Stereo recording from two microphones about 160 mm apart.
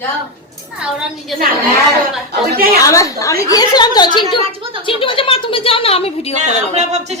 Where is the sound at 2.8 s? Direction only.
20° left (ahead or behind); by 6.3 s 40° left (ahead or behind).